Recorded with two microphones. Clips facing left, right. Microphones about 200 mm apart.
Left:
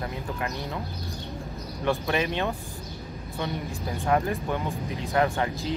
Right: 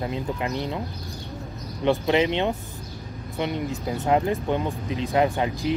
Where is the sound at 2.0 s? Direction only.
20° right (ahead or behind).